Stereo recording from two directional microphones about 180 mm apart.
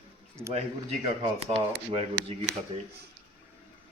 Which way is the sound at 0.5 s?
35° right (ahead or behind).